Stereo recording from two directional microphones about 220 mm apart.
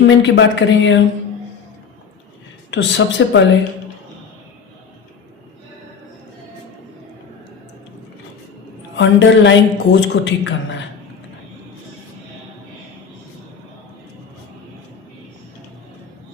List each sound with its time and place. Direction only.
0.0 s a woman's voice: 55° left (ahead or behind)
2.6 s a woman's voice: 55° left (ahead or behind)
9.0 s a woman's voice: 55° left (ahead or behind)